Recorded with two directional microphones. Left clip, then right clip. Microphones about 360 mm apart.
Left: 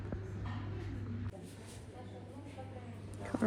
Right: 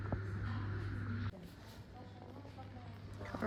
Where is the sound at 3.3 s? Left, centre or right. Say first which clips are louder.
Left 6 dB; left.